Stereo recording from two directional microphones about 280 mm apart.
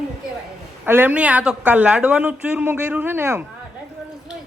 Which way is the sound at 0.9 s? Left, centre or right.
Centre.